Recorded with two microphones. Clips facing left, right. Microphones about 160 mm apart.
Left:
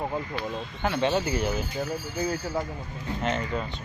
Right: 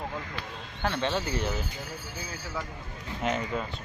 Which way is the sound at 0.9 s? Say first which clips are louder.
Left 6 dB; 15° left (ahead or behind).